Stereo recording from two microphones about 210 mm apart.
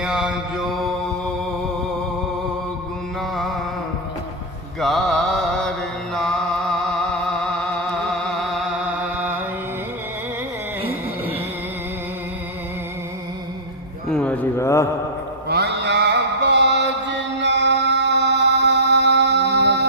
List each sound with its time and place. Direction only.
0.0 s mantra: 5° right (ahead or behind)
3.2 s a sound: centre (ahead or behind)
4.8 s mantra: centre (ahead or behind)
6.1 s music: centre (ahead or behind)
14.1 s a sound: 5° left (ahead or behind)
15.4 s mantra: 50° right (ahead or behind)